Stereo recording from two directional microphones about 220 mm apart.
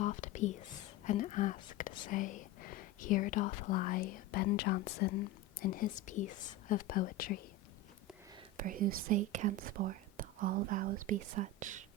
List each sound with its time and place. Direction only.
0.0 s whispering: 35° left (ahead or behind)
1.0 s speech: 35° left (ahead or behind)
8.5 s speech: 40° right (ahead or behind)